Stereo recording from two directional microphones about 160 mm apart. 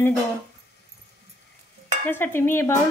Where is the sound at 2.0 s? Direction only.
15° left (ahead or behind).